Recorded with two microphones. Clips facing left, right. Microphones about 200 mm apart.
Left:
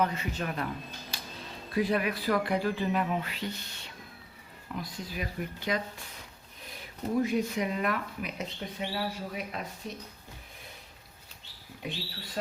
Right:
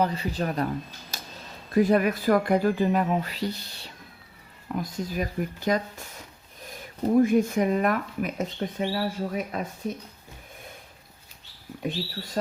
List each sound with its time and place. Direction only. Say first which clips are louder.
0.0 s speech: right 4 dB; 35° right (ahead or behind)
1.1 s a sound: right 2 dB; 45° right (ahead or behind)
1.7 s speech: right 7 dB; 45° right (ahead or behind)
11.8 s speech: right 8 dB; 45° right (ahead or behind)